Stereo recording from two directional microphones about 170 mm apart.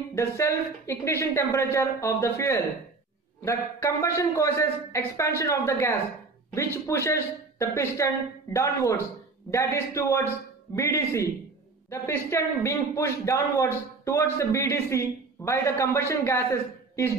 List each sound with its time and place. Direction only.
0.1 s a man's voice: 15° left (ahead or behind)